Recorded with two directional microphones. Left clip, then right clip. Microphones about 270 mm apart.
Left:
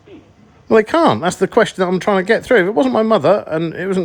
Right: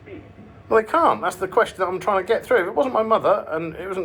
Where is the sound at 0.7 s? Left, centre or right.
Left.